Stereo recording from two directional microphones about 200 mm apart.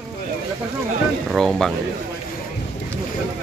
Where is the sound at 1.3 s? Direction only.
Centre (ahead or behind).